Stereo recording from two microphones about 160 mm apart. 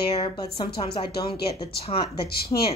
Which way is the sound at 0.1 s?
35° left (ahead or behind).